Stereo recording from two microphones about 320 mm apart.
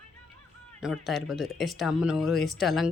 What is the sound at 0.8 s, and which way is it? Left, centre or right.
Speech, centre.